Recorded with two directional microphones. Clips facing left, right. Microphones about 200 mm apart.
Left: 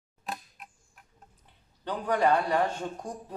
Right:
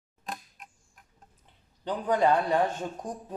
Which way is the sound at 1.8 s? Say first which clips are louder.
Right 1 dB; 20° right (ahead or behind).